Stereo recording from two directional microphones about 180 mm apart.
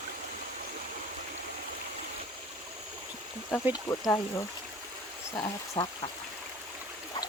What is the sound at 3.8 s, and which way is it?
Speech, 15° left (ahead or behind).